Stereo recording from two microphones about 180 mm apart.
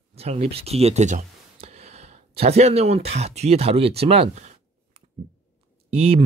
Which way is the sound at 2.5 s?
35° right (ahead or behind).